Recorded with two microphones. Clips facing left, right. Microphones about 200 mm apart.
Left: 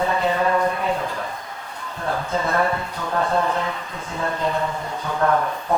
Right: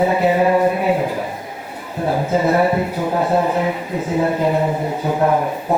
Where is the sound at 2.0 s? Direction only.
10° right (ahead or behind).